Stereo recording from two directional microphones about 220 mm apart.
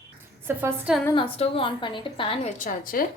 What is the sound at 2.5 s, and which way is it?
Speech, 35° left (ahead or behind).